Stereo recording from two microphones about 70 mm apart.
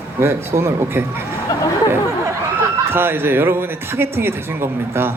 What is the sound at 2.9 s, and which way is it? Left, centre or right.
A man's voice, right.